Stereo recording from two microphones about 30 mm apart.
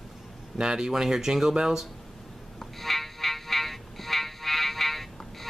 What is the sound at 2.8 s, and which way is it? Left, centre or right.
Fire alarm, centre.